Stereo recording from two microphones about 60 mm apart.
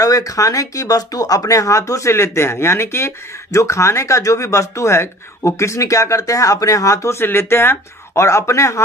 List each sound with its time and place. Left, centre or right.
0.0 s speech: left
7.2 s speech: left